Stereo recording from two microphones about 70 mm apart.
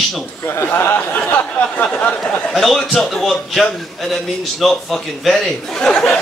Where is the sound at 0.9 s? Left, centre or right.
Left.